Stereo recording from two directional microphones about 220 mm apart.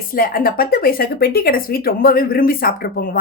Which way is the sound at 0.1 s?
40° left (ahead or behind).